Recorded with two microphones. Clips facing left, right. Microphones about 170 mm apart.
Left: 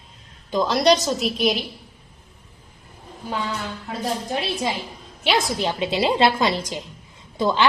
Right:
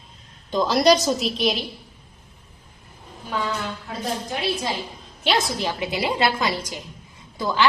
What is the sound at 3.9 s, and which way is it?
Speech, centre (ahead or behind).